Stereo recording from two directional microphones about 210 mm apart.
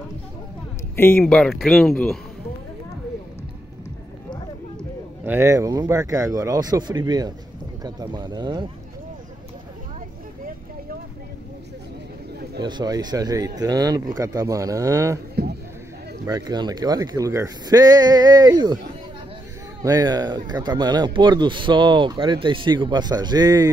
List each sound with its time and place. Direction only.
0.9 s speech: 10° left (ahead or behind)
5.2 s speech: 10° right (ahead or behind)
12.6 s speech: 20° right (ahead or behind)
15.4 s a sound: 45° right (ahead or behind)
16.3 s speech: 20° right (ahead or behind)
19.8 s speech: 15° right (ahead or behind)